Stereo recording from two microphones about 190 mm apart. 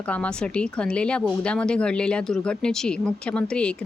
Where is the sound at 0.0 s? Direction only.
5° left (ahead or behind).